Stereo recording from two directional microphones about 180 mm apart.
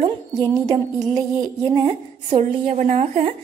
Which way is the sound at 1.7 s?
25° right (ahead or behind).